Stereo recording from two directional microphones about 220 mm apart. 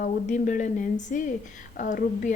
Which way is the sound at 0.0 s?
35° left (ahead or behind).